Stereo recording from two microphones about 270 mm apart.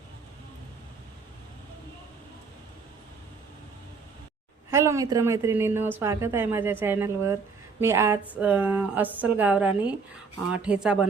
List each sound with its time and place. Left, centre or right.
4.7 s a woman's voice: centre